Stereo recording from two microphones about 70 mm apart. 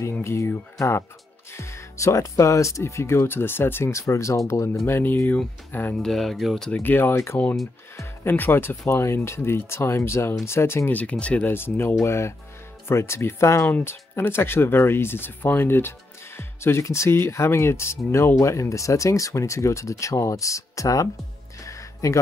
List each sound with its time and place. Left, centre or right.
0.2 s speech: left
5.9 s speech: centre
6.7 s speech: left
10.9 s speech: left
11.5 s speech: left
13.7 s speech: left
21.6 s a sound: left